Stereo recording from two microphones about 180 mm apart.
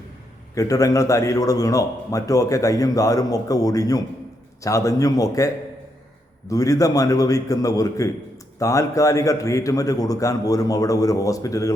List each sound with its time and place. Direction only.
0.5 s a man's voice: 20° left (ahead or behind)
6.5 s a man's voice: 20° left (ahead or behind)